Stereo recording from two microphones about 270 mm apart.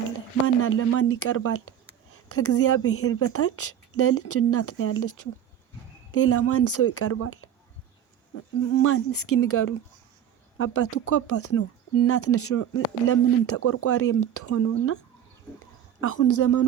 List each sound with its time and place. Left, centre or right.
0.4 s speech: left
16.0 s speech: left